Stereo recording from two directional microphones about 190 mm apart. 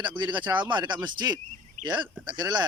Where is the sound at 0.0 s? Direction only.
25° right (ahead or behind).